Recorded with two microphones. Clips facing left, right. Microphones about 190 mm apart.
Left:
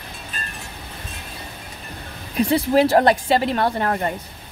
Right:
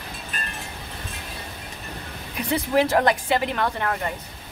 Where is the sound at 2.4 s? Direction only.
30° left (ahead or behind).